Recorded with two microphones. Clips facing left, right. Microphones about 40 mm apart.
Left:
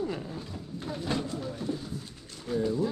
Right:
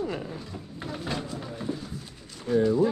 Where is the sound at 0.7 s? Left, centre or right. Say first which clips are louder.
Even; right.